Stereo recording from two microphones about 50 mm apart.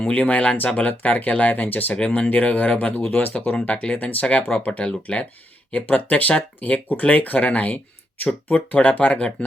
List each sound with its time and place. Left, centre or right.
0.1 s speech: left
1.9 s speech: left